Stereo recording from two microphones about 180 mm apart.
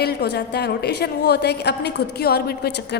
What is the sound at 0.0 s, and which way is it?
A woman's voice, 65° left (ahead or behind).